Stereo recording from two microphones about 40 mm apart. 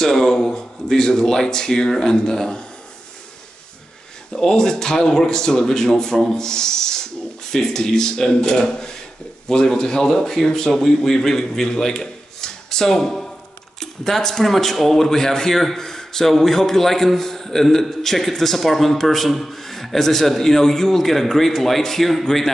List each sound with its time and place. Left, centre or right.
0.0 s speech: centre
4.3 s a man's voice: centre
11.9 s a sound: centre
13.7 s a man's voice: centre